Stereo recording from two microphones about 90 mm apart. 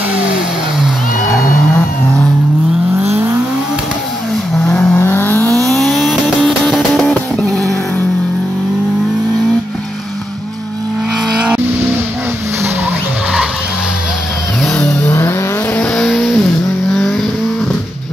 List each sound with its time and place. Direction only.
4.6 s vehicle: 10° left (ahead or behind)
4.9 s vehicle: 25° left (ahead or behind)
5.6 s vehicle: centre (ahead or behind)
6.6 s music: 5° left (ahead or behind)
15.0 s vehicle: 25° left (ahead or behind)
15.8 s vehicle: 10° left (ahead or behind)